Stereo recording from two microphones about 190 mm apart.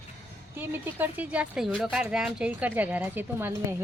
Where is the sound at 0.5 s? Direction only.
10° right (ahead or behind).